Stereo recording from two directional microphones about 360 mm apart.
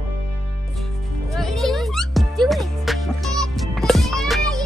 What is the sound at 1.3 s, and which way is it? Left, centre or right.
Music, centre.